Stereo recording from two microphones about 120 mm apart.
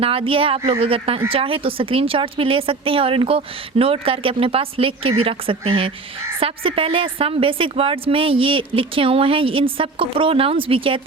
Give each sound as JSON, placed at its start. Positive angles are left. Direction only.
{"t": 0.0, "sound": "a woman's voice", "side_deg": -50}